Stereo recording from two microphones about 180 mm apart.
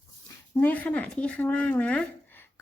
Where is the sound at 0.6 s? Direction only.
10° left (ahead or behind).